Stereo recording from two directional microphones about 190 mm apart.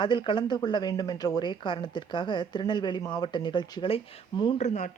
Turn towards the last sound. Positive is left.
turn(degrees=40)  # may be behind; listen again after turning